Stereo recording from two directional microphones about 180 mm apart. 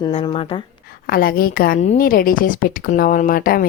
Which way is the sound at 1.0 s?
55° left (ahead or behind).